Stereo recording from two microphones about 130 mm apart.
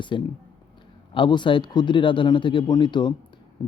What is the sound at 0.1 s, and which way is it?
Speech, 40° left (ahead or behind).